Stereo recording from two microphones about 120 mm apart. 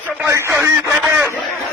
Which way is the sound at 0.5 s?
10° right (ahead or behind).